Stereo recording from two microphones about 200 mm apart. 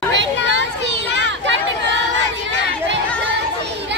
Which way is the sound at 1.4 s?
65° right (ahead or behind).